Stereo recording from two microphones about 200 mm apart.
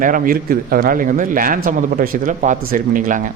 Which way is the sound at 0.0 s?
45° right (ahead or behind).